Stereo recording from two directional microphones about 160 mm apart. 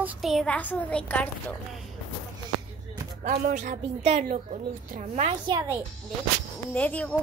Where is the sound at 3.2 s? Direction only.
60° right (ahead or behind).